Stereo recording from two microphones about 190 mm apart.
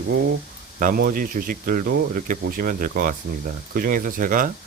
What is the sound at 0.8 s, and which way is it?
Speech, 50° right (ahead or behind).